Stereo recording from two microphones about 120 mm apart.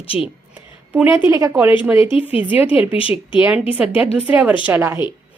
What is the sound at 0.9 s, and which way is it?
Speech, 15° right (ahead or behind).